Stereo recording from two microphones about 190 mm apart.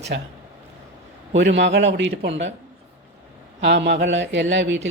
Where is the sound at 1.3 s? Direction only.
70° right (ahead or behind).